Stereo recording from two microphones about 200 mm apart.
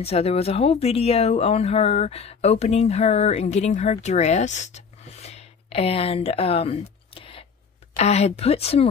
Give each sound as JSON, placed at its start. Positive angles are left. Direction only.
{"t": 0.0, "sound": "speech", "side_deg": 30}